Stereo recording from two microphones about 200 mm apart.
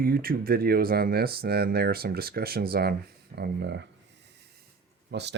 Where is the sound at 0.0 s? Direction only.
45° right (ahead or behind).